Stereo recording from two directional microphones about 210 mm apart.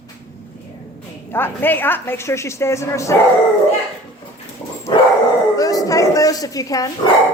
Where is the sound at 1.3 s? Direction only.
10° left (ahead or behind).